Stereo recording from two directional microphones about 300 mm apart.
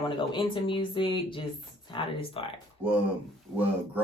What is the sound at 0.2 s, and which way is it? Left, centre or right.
Speech, centre.